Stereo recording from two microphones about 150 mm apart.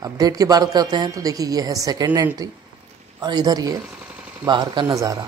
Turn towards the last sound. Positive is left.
turn(degrees=-20)  # may be behind; listen again after turning